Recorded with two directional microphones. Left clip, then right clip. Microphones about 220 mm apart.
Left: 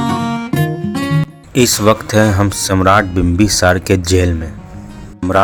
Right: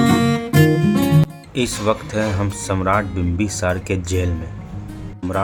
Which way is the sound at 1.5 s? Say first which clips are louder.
Left 8 dB; 30° left (ahead or behind).